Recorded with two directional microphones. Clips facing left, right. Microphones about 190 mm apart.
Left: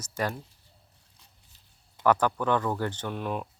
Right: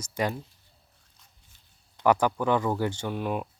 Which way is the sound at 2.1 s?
10° right (ahead or behind).